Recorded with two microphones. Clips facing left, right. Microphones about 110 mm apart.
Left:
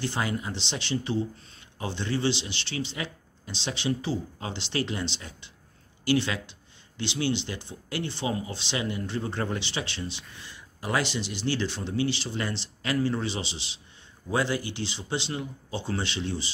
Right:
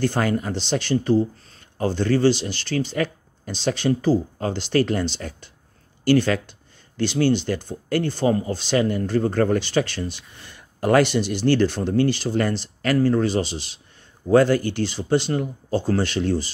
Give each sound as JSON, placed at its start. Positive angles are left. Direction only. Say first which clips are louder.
{"t": 0.0, "sound": "speech", "louder": "right 8 dB", "side_deg": -50}